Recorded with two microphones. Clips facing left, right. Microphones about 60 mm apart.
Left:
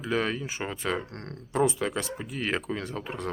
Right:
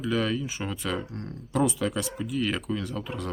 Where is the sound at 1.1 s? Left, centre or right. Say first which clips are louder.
Right 2 dB; left.